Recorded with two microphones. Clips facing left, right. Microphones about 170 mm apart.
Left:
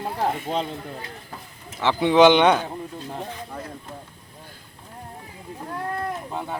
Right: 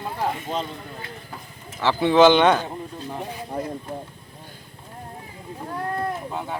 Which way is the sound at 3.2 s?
10° right (ahead or behind).